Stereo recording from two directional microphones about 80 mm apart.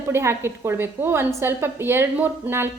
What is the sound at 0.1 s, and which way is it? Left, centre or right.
A woman's voice, right.